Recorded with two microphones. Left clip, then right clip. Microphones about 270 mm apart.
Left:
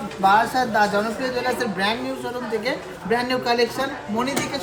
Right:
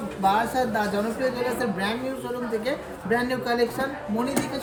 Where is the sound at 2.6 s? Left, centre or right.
Centre.